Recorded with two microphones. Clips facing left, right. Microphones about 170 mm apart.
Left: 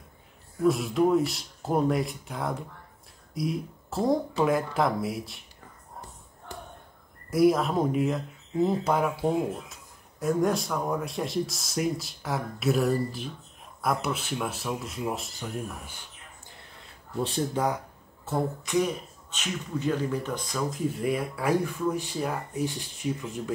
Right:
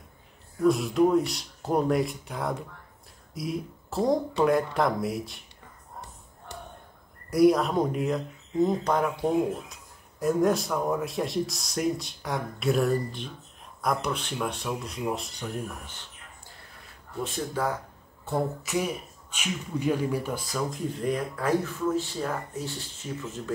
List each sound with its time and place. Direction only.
0.7 s speech: centre (ahead or behind)
7.2 s speech: centre (ahead or behind)
17.6 s speech: 20° left (ahead or behind)
18.2 s speech: centre (ahead or behind); by 23.5 s 15° left (ahead or behind)